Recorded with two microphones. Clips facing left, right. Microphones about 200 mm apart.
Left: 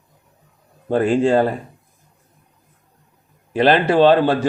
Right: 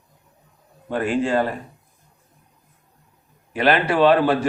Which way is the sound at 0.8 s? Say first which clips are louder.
Left 6 dB; 35° left (ahead or behind).